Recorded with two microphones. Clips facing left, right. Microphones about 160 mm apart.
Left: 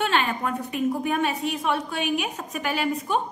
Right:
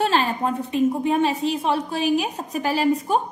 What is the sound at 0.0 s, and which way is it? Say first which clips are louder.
A woman's voice: right 3 dB; 35° right (ahead or behind).